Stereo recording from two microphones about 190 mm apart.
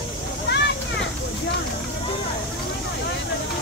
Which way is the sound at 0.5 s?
60° left (ahead or behind).